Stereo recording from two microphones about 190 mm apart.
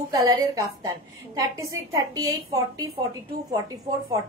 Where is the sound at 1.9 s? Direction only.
20° right (ahead or behind).